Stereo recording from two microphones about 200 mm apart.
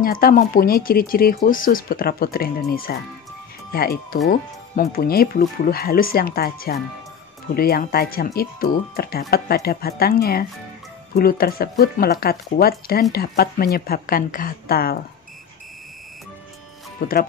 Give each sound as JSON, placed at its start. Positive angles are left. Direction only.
{"t": 0.0, "sound": "speech", "side_deg": 45}
{"t": 17.0, "sound": "speech", "side_deg": 45}